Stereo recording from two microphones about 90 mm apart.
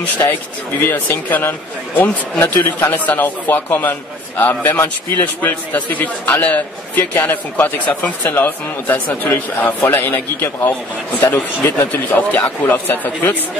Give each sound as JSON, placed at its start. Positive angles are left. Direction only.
{"t": 0.3, "sound": "a man's voice", "side_deg": 20}